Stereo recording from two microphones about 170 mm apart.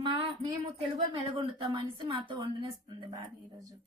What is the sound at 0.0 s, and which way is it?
A woman's voice, 30° right (ahead or behind).